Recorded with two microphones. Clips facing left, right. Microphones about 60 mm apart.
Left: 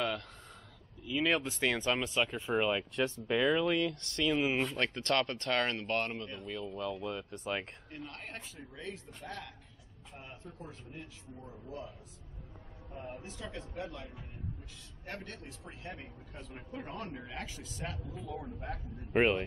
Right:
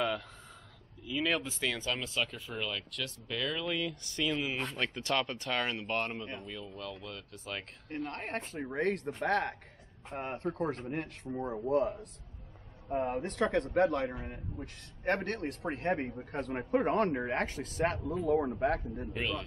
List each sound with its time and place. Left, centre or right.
1.0 s speech: centre
3.9 s speech: centre
4.4 s speech: centre
4.7 s speech: centre
6.4 s speech: centre
7.9 s a man's voice: right
15.9 s a man's voice: right
19.1 s a man's voice: left